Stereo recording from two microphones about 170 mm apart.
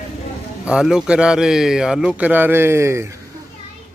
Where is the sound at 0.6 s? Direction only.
5° right (ahead or behind).